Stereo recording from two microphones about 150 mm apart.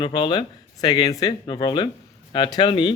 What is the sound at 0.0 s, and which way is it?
Speech, 30° left (ahead or behind).